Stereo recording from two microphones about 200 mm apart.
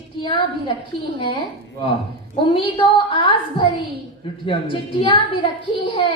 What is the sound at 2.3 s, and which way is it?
A woman's voice, 25° left (ahead or behind).